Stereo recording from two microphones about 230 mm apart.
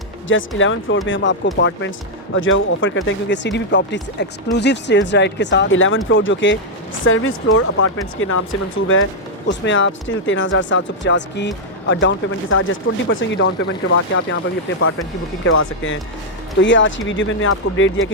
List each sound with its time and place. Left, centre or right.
0.3 s speech: left
9.5 s speech: left
15.4 s speech: left